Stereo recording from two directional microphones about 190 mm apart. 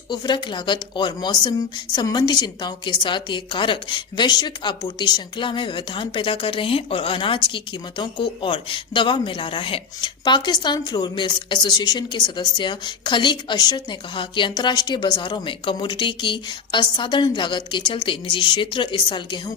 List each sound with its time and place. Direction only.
0.1 s a woman's voice: 25° left (ahead or behind)